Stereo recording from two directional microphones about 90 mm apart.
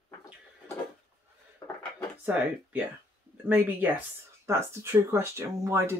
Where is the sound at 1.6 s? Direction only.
45° left (ahead or behind).